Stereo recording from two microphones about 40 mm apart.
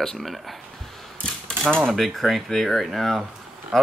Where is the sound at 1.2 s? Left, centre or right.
Left.